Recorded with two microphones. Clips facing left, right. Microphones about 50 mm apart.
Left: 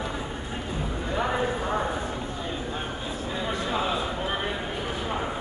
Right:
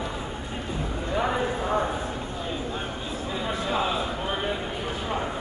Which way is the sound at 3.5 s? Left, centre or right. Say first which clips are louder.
Right 1 dB; centre.